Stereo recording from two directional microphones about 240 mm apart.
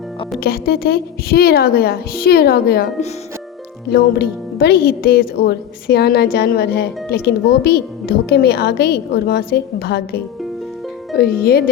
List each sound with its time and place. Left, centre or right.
0.3 s speech: left
11.2 s speech: left